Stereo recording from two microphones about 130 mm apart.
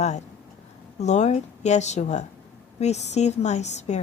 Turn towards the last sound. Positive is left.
turn(degrees=60)  # may be behind; listen again after turning